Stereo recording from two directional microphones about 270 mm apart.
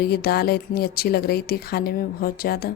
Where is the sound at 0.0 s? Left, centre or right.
Left.